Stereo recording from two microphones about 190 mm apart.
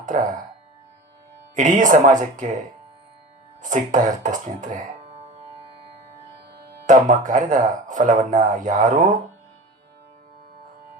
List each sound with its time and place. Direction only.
0.0 s speech: 40° right (ahead or behind)
1.5 s speech: 40° right (ahead or behind)
3.6 s speech: 40° right (ahead or behind)
6.8 s speech: 40° right (ahead or behind)